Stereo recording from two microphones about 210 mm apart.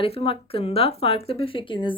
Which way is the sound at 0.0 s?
25° left (ahead or behind).